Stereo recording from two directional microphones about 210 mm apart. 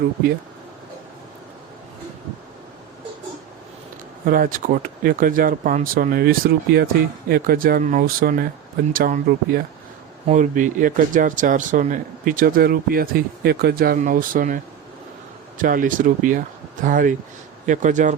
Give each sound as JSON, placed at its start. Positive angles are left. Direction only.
{"t": 4.3, "sound": "speech", "side_deg": -40}